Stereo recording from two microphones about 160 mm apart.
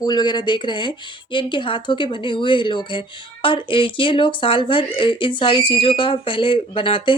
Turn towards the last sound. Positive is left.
turn(degrees=35)  # may be behind; listen again after turning